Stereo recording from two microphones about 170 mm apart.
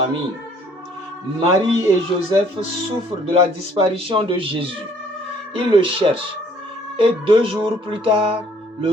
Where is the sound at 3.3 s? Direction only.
30° right (ahead or behind).